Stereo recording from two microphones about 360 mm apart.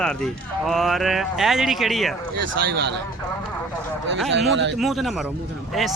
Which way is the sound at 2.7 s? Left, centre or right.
Right.